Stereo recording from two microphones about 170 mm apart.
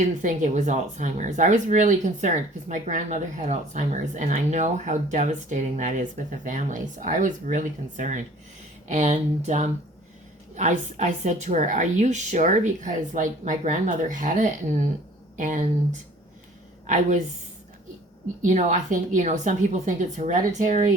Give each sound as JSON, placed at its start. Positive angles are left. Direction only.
{"t": 0.0, "sound": "speech", "side_deg": -45}
{"t": 16.8, "sound": "a woman's voice", "side_deg": -45}
{"t": 18.4, "sound": "speech", "side_deg": -45}